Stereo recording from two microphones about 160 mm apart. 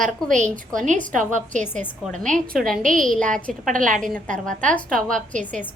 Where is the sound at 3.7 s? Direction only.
55° right (ahead or behind).